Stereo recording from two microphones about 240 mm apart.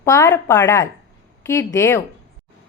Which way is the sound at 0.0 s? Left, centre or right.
Centre.